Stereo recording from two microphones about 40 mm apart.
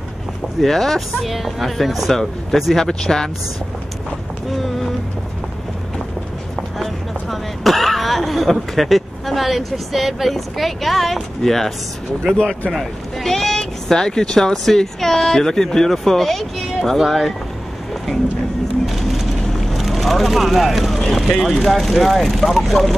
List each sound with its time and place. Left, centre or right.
0.6 s speech: centre
2.7 s speech: centre
6.8 s speech: centre
12.4 s speech: left
12.7 s speech: centre
18.9 s vehicle: centre
19.7 s speech: centre